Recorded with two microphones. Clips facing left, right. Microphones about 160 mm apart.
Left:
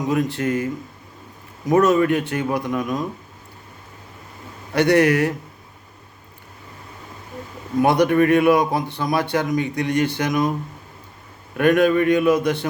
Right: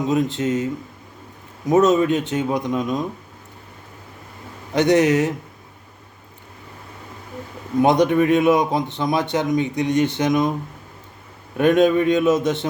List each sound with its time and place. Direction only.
0.1 s a man's voice: 20° right (ahead or behind)
4.7 s a man's voice: 20° right (ahead or behind)
7.8 s a man's voice: 20° right (ahead or behind)
11.5 s a man's voice: 20° right (ahead or behind)